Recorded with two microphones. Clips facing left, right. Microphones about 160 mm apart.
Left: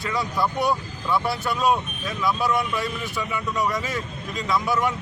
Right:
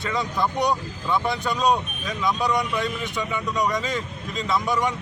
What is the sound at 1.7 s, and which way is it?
Speech, 20° right (ahead or behind).